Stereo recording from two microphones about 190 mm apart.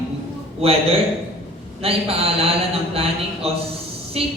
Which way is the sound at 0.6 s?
30° right (ahead or behind).